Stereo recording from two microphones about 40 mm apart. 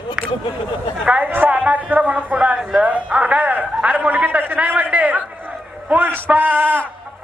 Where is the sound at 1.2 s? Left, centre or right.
Right.